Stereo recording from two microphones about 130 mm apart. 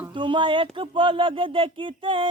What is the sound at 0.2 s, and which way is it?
Speech, 40° right (ahead or behind).